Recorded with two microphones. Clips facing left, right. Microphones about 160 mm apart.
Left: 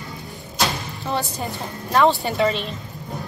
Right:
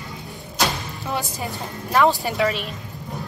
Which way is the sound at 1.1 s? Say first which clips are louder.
Left 2 dB; 5° right (ahead or behind).